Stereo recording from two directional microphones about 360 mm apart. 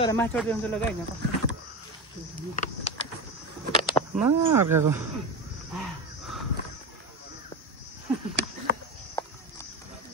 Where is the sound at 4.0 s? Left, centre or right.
Centre.